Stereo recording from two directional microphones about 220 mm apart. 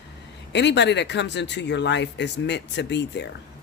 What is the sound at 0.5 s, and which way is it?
Speech, 50° left (ahead or behind).